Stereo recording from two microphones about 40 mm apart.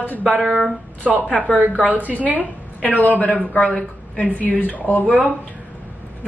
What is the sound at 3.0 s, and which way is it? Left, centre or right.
Speech, left.